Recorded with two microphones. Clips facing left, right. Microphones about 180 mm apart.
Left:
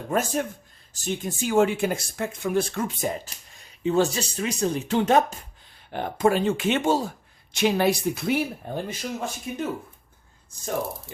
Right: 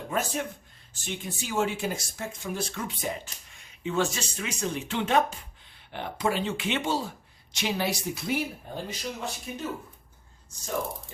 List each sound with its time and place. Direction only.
0.1 s speech: 45° left (ahead or behind)